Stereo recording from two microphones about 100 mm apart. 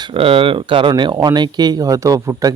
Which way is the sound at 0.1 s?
65° right (ahead or behind).